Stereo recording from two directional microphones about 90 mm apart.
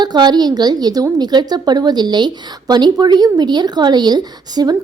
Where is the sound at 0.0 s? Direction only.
50° right (ahead or behind).